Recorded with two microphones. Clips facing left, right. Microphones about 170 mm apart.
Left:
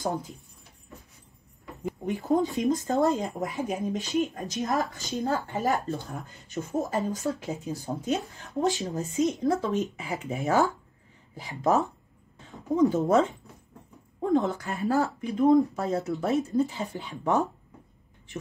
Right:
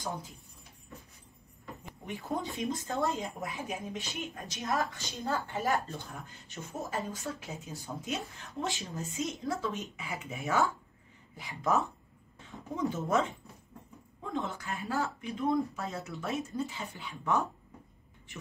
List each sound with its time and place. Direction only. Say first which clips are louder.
2.0 s speech: left 10 dB; 40° left (ahead or behind)
14.3 s speech: left 10 dB; 40° left (ahead or behind)